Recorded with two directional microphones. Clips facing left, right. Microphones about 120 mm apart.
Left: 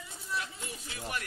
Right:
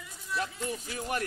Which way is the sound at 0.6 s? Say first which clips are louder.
Right 7 dB; 40° right (ahead or behind).